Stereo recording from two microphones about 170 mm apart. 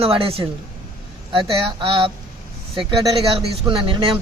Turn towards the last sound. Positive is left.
turn(degrees=-30)  # may be behind; listen again after turning